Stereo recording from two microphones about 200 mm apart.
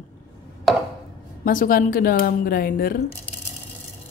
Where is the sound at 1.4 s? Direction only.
45° left (ahead or behind).